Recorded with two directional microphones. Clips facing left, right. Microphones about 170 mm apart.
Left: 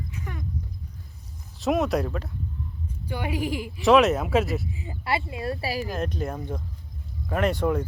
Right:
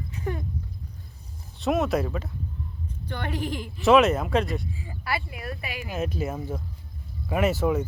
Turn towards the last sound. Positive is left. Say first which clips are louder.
# even
turn(degrees=-5)  # may be behind; listen again after turning